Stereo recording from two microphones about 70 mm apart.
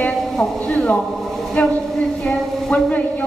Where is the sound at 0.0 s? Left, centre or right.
Left.